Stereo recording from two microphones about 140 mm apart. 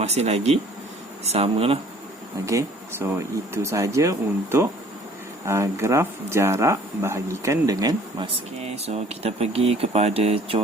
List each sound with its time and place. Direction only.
0.0 s speech: 50° right (ahead or behind)
3.5 s speech: 20° right (ahead or behind)
8.3 s speech: 50° right (ahead or behind)